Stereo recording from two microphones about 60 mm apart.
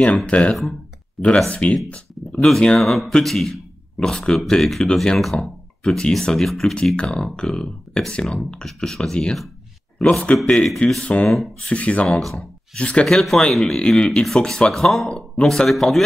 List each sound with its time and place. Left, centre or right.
0.3 s speech: centre
1.2 s speech: centre
1.5 s speech: left
2.3 s a man's voice: centre
10.2 s speech: centre
11.2 s speech: centre
11.7 s speech: left
12.1 s speech: centre
12.7 s speech: centre
13.0 s speech: centre